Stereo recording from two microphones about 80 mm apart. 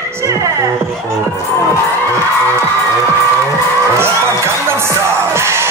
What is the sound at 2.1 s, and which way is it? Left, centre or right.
Music, right.